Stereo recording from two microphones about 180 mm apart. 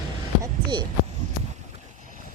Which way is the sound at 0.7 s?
25° right (ahead or behind).